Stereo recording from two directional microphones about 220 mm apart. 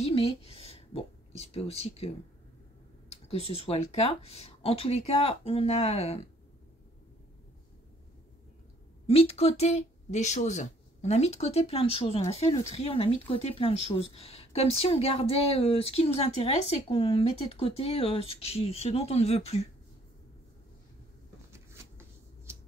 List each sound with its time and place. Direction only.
0.0 s a woman's voice: 25° left (ahead or behind)
3.1 s speech: 25° left (ahead or behind)
9.0 s speech: 25° left (ahead or behind)